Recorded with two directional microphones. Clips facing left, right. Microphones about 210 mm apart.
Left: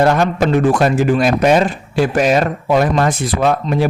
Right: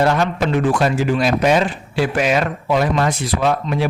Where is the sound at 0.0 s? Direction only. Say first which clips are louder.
Left 3 dB; 45° left (ahead or behind).